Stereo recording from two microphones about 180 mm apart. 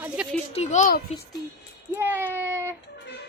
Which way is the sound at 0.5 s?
40° left (ahead or behind).